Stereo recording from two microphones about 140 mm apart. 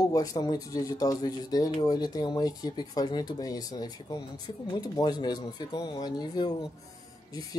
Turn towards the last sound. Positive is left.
turn(degrees=25)  # may be behind; listen again after turning